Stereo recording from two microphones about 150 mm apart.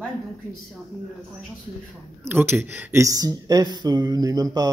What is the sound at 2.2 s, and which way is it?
Speech, 15° right (ahead or behind).